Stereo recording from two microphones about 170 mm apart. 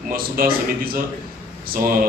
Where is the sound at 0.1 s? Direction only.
60° right (ahead or behind).